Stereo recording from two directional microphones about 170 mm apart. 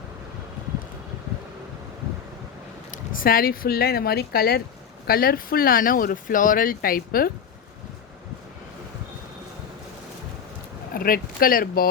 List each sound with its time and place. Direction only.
2.9 s speech: 55° left (ahead or behind)
10.9 s speech: 55° left (ahead or behind)